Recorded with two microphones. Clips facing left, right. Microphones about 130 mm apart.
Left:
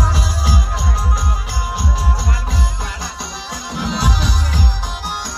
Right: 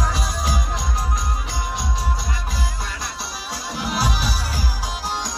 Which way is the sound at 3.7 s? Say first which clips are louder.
Left 3 dB; centre (ahead or behind).